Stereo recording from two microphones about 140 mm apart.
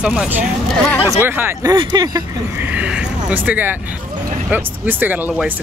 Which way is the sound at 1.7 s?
30° right (ahead or behind).